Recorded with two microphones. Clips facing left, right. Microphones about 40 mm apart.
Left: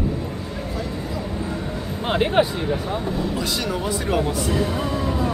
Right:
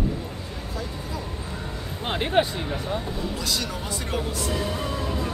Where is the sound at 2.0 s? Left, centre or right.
Centre.